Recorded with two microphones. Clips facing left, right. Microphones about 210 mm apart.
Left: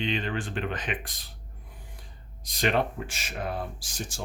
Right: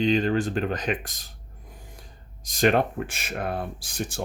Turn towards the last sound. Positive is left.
turn(degrees=-60)  # may be behind; listen again after turning